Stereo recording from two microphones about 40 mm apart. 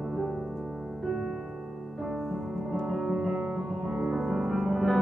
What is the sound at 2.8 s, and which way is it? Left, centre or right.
Music, centre.